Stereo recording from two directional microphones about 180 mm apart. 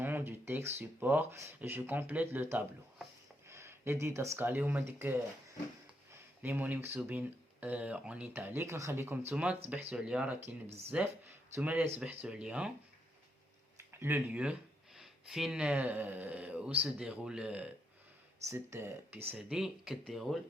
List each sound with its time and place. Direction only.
0.0 s a sound: 10° right (ahead or behind)
0.8 s speech: 10° right (ahead or behind)
3.4 s a sound: 15° right (ahead or behind)
4.0 s speech: 15° right (ahead or behind)
10.7 s speech: 35° right (ahead or behind)
11.5 s speech: 10° right (ahead or behind)
13.7 s speech: 15° right (ahead or behind)
19.3 s speech: 5° right (ahead or behind)